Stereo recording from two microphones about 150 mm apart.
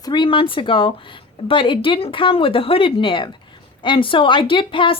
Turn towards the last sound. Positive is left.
turn(degrees=35)  # may be behind; listen again after turning